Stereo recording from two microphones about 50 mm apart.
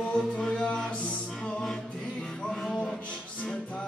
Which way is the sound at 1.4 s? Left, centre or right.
Centre.